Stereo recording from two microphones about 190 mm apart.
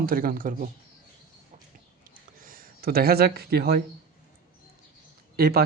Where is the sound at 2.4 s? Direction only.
50° right (ahead or behind).